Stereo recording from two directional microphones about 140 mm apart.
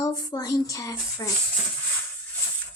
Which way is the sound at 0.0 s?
25° left (ahead or behind).